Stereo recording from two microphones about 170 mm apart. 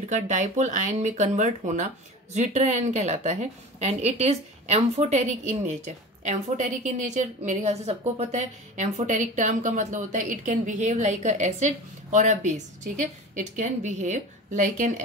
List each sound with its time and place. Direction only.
0.1 s a woman's voice: 45° right (ahead or behind)